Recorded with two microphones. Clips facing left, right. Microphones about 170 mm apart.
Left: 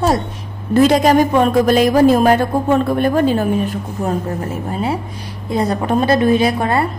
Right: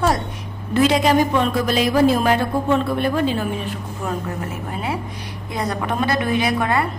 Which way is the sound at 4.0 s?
35° left (ahead or behind).